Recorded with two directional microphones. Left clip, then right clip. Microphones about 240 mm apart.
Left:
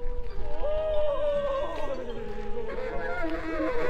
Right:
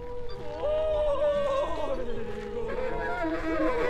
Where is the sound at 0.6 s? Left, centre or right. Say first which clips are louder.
Right 1 dB; right.